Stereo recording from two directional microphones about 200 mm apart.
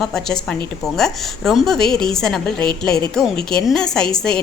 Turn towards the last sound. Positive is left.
turn(degrees=5)  # may be behind; listen again after turning